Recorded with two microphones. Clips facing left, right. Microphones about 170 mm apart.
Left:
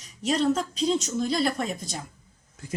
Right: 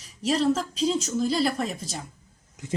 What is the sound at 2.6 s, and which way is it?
Speech, 15° right (ahead or behind).